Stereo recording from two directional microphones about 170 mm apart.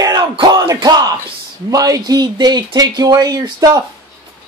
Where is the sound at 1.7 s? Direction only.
20° right (ahead or behind).